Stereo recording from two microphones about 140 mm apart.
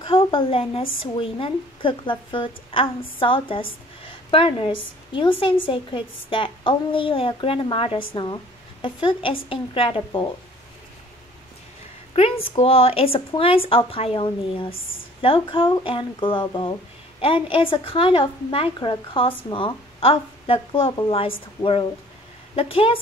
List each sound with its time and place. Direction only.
0.0 s a woman's voice: 40° left (ahead or behind)
12.2 s a woman's voice: 45° left (ahead or behind)